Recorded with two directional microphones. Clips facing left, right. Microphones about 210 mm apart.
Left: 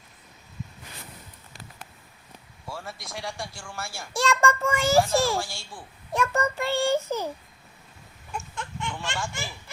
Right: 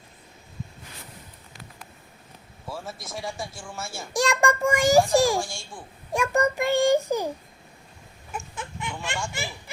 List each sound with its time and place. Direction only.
2.6 s speech: centre (ahead or behind)
4.1 s a child's voice: 15° right (ahead or behind)
5.4 s speech: centre (ahead or behind)
6.1 s a child's voice: 15° right (ahead or behind)
8.3 s a sound: 5° right (ahead or behind)